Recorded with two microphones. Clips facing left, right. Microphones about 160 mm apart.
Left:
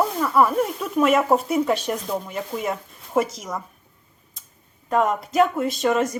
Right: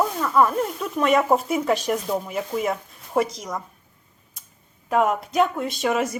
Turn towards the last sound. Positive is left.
turn(degrees=-5)  # may be behind; listen again after turning